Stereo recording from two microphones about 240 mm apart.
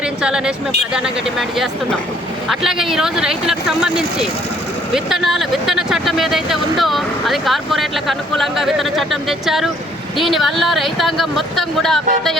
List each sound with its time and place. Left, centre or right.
0.2 s speech: centre
2.6 s speech: centre